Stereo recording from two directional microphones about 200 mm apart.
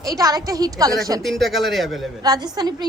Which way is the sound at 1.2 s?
Centre (ahead or behind).